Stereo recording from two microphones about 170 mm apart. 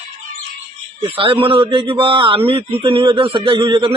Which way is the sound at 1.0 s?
30° right (ahead or behind).